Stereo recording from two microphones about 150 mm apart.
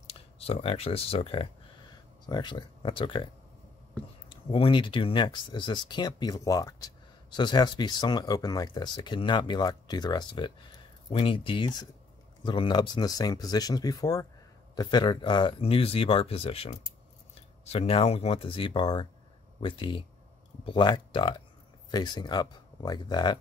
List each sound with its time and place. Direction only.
0.0 s speech: 40° left (ahead or behind)
2.2 s speech: 30° left (ahead or behind)
4.3 s speech: 35° left (ahead or behind)